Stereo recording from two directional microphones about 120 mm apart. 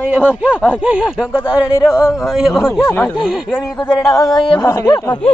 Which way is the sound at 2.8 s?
15° left (ahead or behind).